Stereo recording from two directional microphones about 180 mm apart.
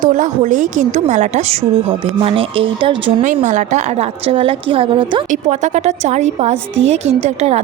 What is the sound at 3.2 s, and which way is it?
Speech, 40° right (ahead or behind).